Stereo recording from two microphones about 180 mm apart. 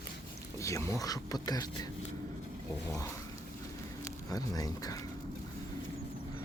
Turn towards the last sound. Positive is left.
turn(degrees=20)  # may be behind; listen again after turning